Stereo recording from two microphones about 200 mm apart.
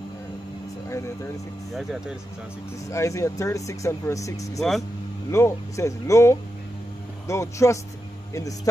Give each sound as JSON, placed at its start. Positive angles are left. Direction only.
{"t": 0.8, "sound": "speech", "side_deg": 15}
{"t": 1.7, "sound": "speech", "side_deg": 0}
{"t": 2.9, "sound": "speech", "side_deg": 15}
{"t": 4.6, "sound": "speech", "side_deg": 0}
{"t": 5.3, "sound": "speech", "side_deg": 15}